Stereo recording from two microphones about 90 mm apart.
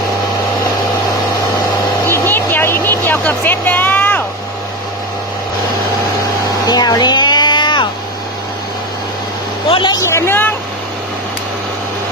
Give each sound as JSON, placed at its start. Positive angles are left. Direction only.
{"t": 2.0, "sound": "vehicle", "side_deg": 25}
{"t": 6.7, "sound": "a sound", "side_deg": 50}
{"t": 9.6, "sound": "vehicle", "side_deg": 75}
{"t": 10.1, "sound": "speech", "side_deg": 30}